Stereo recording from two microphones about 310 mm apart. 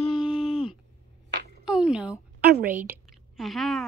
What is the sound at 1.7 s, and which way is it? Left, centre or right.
A woman's voice, centre.